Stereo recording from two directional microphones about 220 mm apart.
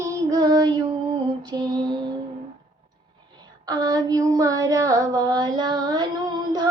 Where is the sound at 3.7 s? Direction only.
20° right (ahead or behind).